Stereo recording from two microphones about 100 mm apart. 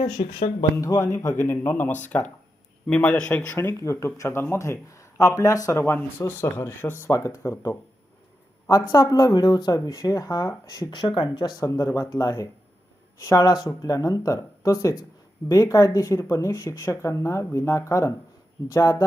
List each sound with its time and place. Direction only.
0.8 s a man's voice: 30° left (ahead or behind); by 3.4 s 10° left (ahead or behind)
3.5 s speech: 30° left (ahead or behind)
5.7 s speech: 20° left (ahead or behind); by 11.6 s 50° left (ahead or behind)
11.6 s speech: 35° left (ahead or behind)